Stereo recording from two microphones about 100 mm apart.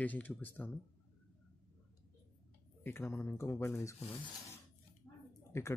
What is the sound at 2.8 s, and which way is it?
A man's voice, 25° left (ahead or behind).